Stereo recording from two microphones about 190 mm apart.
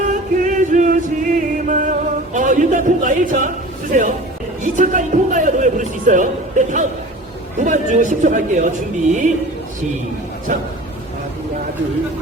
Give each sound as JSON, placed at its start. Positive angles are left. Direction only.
{"t": 0.0, "sound": "music", "side_deg": -40}
{"t": 3.9, "sound": "a man's voice", "side_deg": -45}
{"t": 10.5, "sound": "speech", "side_deg": -45}